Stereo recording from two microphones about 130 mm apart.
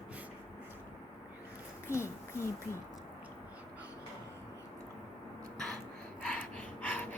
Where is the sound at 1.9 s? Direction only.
20° left (ahead or behind).